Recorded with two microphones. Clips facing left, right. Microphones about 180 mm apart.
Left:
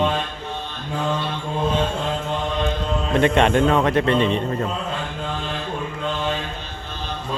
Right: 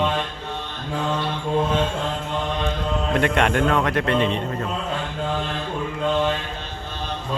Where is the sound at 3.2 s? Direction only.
25° left (ahead or behind).